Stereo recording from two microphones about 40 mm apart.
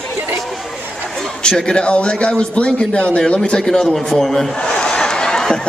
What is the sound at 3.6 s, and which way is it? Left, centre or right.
A man's voice, centre.